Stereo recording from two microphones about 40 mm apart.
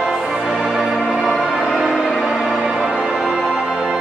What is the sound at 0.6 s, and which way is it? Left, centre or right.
Music, centre.